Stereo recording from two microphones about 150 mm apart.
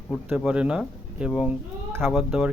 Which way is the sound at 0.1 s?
Centre (ahead or behind).